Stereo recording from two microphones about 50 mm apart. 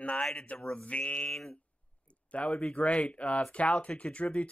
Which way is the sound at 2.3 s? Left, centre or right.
Left.